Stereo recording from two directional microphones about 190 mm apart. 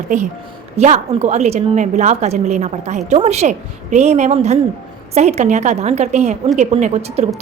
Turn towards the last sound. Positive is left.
turn(degrees=-35)  # may be behind; listen again after turning